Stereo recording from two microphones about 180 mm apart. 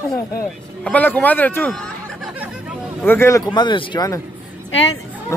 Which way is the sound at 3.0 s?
15° left (ahead or behind).